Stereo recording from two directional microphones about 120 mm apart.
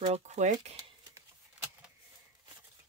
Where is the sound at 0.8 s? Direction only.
25° right (ahead or behind).